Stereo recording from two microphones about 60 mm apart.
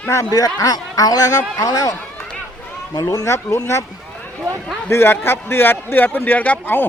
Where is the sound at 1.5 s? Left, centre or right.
Left.